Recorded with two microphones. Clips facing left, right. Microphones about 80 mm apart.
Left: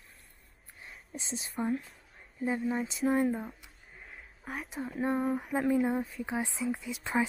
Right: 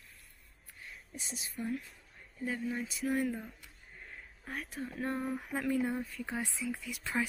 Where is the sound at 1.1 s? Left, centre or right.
Left.